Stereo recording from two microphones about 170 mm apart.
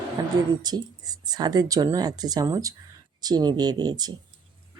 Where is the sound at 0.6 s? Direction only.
25° right (ahead or behind).